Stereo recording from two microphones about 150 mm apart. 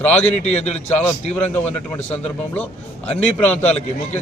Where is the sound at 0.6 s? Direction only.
45° left (ahead or behind).